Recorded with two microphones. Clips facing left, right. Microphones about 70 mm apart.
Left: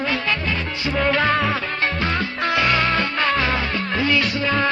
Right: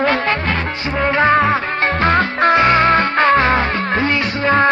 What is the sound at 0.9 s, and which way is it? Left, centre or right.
Music, right.